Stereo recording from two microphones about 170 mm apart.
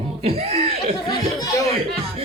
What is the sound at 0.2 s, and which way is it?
Chuckle, 35° right (ahead or behind).